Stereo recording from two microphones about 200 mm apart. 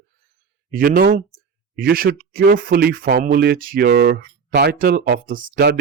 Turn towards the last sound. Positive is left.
turn(degrees=-50)  # may be behind; listen again after turning